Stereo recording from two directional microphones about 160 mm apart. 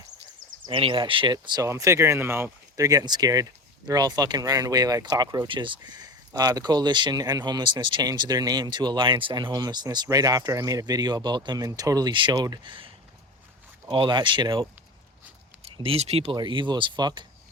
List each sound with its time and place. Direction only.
0.7 s speech: 30° right (ahead or behind)
15.6 s speech: 40° right (ahead or behind)